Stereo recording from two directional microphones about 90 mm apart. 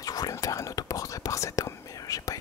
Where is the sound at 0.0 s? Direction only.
45° left (ahead or behind).